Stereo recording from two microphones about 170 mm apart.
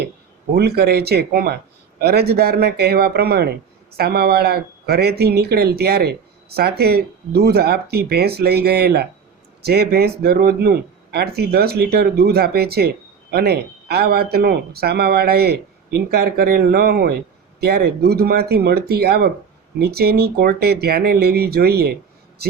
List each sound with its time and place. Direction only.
0.5 s speech: 70° right (ahead or behind)